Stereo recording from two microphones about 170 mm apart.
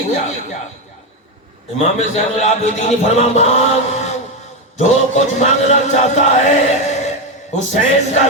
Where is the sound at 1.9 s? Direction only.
40° left (ahead or behind).